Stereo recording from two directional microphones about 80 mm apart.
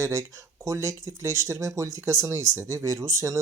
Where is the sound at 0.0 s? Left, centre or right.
Right.